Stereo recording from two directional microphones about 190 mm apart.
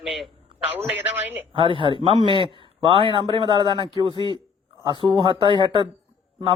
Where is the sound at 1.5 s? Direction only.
25° right (ahead or behind).